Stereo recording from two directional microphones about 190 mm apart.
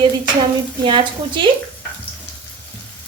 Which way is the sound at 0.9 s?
25° right (ahead or behind).